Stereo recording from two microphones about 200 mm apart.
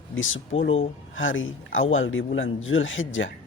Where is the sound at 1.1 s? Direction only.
75° left (ahead or behind).